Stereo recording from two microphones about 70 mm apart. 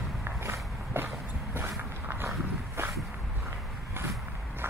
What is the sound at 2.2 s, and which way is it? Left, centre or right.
Walk, right.